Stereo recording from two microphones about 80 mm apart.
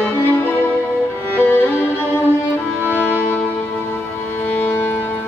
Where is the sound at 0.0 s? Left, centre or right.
Left.